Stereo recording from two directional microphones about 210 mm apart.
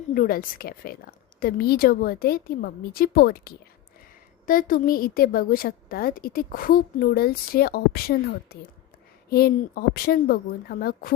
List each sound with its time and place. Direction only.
0.1 s a woman's voice: 45° left (ahead or behind)